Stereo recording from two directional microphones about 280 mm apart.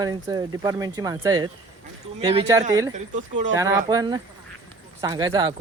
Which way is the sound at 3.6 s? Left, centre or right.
Centre.